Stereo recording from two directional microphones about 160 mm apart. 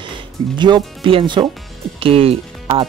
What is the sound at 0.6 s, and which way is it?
Speech, 30° right (ahead or behind).